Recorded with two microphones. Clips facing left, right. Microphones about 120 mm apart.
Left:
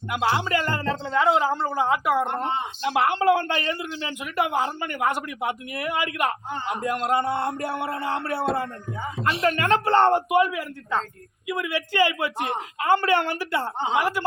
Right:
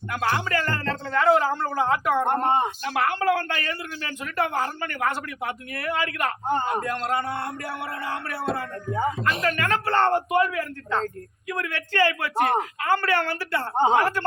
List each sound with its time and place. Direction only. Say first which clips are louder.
0.1 s speech: left 2 dB; 15° left (ahead or behind)
2.2 s speech: right 5 dB; 50° right (ahead or behind)
2.8 s speech: left 3 dB; 20° left (ahead or behind)
8.9 s speech: right 6 dB; 40° right (ahead or behind)
9.4 s speech: left 7 dB; 25° left (ahead or behind)
12.4 s speech: right 6 dB; 45° right (ahead or behind)
12.8 s speech: left 6 dB; 20° left (ahead or behind)
13.7 s speech: right 7 dB; 45° right (ahead or behind)